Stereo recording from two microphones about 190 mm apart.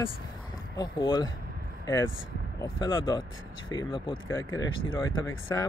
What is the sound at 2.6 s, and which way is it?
Speech, 20° left (ahead or behind).